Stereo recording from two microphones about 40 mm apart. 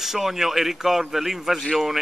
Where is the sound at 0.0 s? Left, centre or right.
Centre.